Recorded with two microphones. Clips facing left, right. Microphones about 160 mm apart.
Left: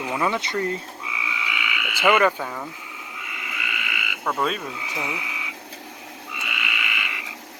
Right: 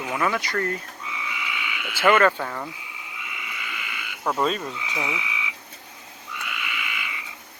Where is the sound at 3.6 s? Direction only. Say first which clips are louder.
Left 7 dB; 70° left (ahead or behind).